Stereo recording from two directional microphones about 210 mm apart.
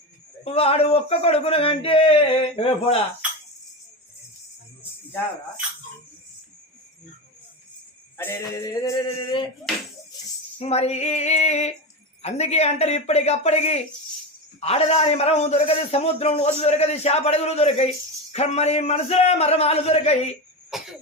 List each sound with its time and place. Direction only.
0.4 s a man's voice: 30° left (ahead or behind)
8.2 s a sound: 15° left (ahead or behind)
10.6 s a man's voice: 30° left (ahead or behind)
20.7 s cough: centre (ahead or behind)